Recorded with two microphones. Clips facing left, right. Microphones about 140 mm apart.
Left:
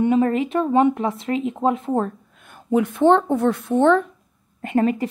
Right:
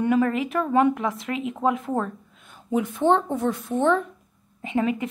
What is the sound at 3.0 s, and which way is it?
Speech, 75° left (ahead or behind).